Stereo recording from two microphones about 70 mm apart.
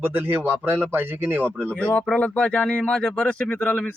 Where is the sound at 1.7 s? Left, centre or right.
Centre.